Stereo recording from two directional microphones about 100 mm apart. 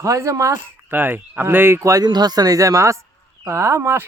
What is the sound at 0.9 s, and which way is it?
Speech, 20° right (ahead or behind).